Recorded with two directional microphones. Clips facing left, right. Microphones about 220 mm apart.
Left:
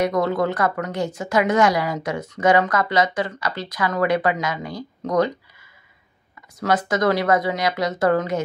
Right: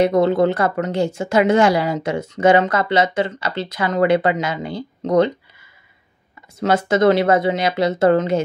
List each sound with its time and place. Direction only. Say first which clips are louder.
0.0 s a woman's voice: right 5 dB; 25° right (ahead or behind)
6.6 s a woman's voice: right 5 dB; 25° right (ahead or behind)